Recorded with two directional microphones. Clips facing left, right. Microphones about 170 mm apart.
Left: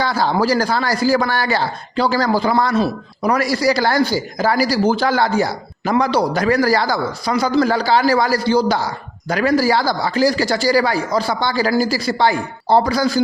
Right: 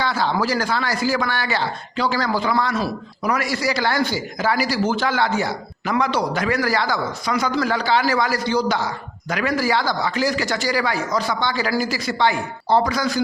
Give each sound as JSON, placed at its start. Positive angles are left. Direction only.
{"t": 0.0, "sound": "speech", "side_deg": 40}